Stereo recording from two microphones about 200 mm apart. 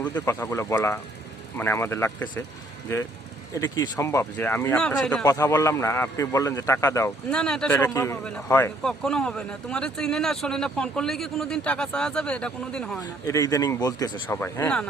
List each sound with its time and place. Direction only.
0.0 s a man's voice: 10° left (ahead or behind)
3.5 s a man's voice: 15° left (ahead or behind)
5.2 s a man's voice: 15° left (ahead or behind)
7.3 s a man's voice: 5° left (ahead or behind)
13.0 s a man's voice: 15° left (ahead or behind)